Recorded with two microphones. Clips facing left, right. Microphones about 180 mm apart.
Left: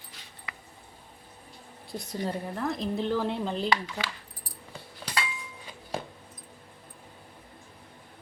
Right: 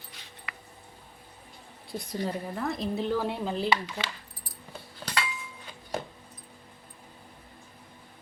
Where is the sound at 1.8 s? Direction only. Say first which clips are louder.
Even; centre (ahead or behind).